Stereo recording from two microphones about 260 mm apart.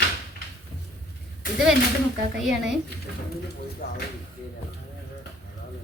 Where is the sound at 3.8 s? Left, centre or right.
Left.